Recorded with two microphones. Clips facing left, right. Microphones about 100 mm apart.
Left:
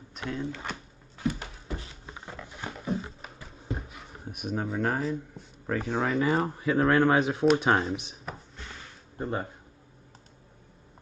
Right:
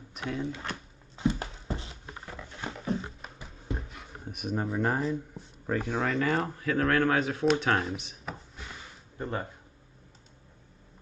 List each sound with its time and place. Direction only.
0.1 s speech: 5° right (ahead or behind)
1.1 s a sound: 25° right (ahead or behind)
2.4 s dog: 10° left (ahead or behind)
4.4 s speech: centre (ahead or behind)
6.4 s speech: 20° left (ahead or behind)
9.2 s speech: 15° left (ahead or behind)